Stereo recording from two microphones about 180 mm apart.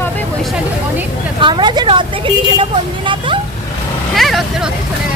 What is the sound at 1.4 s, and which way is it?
Speech, 25° right (ahead or behind).